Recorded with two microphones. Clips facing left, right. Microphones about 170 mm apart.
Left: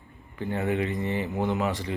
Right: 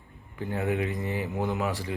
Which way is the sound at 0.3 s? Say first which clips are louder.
Left 1 dB; centre (ahead or behind).